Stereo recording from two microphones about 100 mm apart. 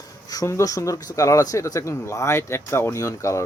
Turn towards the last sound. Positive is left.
turn(degrees=30)  # may be behind; listen again after turning